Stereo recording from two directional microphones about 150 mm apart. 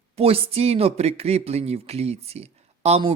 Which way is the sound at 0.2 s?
40° right (ahead or behind).